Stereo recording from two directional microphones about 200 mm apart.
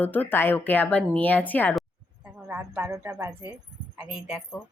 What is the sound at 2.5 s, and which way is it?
Speech, 10° right (ahead or behind).